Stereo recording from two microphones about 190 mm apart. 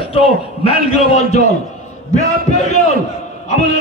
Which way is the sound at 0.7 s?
30° left (ahead or behind).